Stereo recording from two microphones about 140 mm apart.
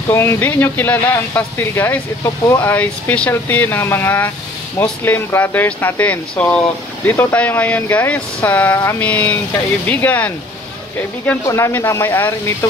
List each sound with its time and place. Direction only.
0.1 s speech: 15° left (ahead or behind)
2.2 s speech: 20° left (ahead or behind)
2.7 s speech: 10° left (ahead or behind)
11.4 s speech: 20° left (ahead or behind)